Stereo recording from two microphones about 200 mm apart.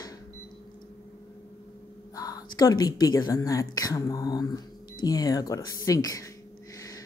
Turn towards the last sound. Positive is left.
turn(degrees=20)  # may be behind; listen again after turning